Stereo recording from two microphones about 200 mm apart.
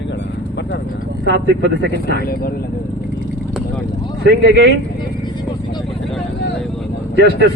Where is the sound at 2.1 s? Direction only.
50° left (ahead or behind).